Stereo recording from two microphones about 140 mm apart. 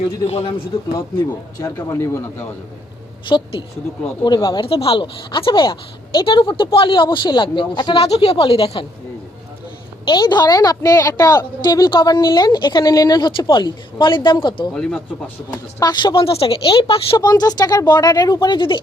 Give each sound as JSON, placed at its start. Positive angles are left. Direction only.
{"t": 0.3, "sound": "a man's voice", "side_deg": 45}
{"t": 1.6, "sound": "a man's voice", "side_deg": 20}
{"t": 3.2, "sound": "a woman's voice", "side_deg": 35}
{"t": 4.6, "sound": "a woman's voice", "side_deg": 40}
{"t": 10.1, "sound": "a woman's voice", "side_deg": 30}
{"t": 14.7, "sound": "speech", "side_deg": 5}
{"t": 15.4, "sound": "a woman's voice", "side_deg": 30}